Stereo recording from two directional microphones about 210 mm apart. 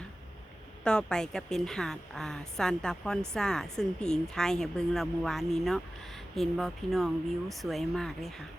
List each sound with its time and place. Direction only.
0.9 s a woman's voice: 5° left (ahead or behind)